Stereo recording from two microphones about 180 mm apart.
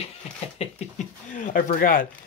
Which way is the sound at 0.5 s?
40° left (ahead or behind).